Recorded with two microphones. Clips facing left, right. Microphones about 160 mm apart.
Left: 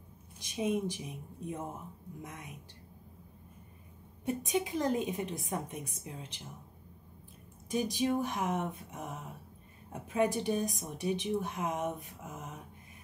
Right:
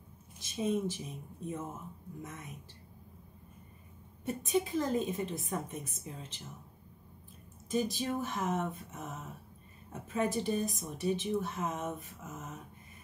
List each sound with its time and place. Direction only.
0.4 s a woman's voice: 15° left (ahead or behind)
4.2 s a woman's voice: 15° left (ahead or behind)
7.7 s a woman's voice: 15° left (ahead or behind)
10.1 s a woman's voice: 15° left (ahead or behind)